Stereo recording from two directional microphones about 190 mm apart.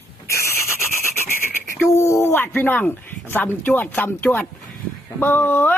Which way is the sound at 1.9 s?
15° left (ahead or behind).